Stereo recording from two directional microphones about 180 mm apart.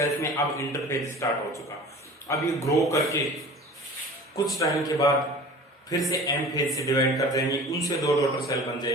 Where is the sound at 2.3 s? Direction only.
15° left (ahead or behind).